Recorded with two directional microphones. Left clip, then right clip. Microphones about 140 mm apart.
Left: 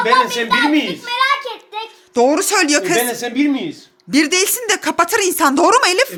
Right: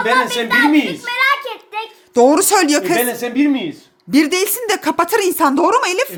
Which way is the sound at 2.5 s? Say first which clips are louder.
Even; 20° right (ahead or behind).